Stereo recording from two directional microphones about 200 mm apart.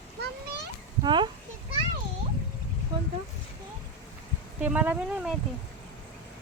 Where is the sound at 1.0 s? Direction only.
25° right (ahead or behind).